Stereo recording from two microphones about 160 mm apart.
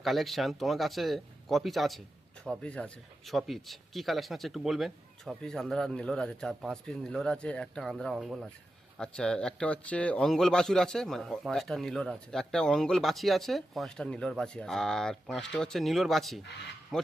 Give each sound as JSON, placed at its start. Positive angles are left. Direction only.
{"t": 0.0, "sound": "a man's voice", "side_deg": 0}